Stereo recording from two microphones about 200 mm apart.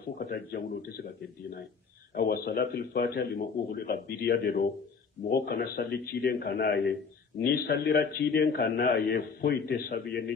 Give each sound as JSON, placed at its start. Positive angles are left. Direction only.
{"t": 0.2, "sound": "a man's voice", "side_deg": 50}
{"t": 2.1, "sound": "a man's voice", "side_deg": 50}